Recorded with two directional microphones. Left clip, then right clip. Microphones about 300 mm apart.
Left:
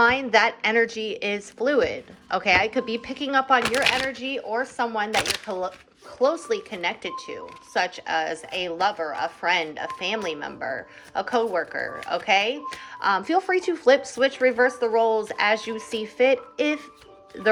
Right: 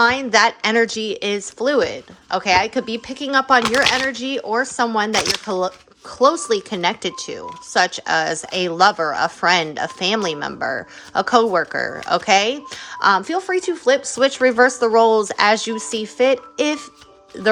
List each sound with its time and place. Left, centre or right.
0.0 s speech: centre